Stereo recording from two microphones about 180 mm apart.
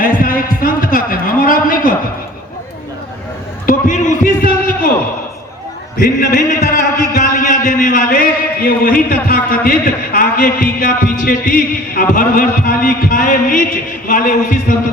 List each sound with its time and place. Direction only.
0.0 s heart sounds: 50° left (ahead or behind)
3.7 s a sound: 45° left (ahead or behind)
6.0 s a man's voice: 50° left (ahead or behind)